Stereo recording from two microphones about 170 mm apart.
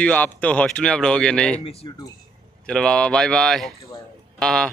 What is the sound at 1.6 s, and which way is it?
Speech, 35° left (ahead or behind).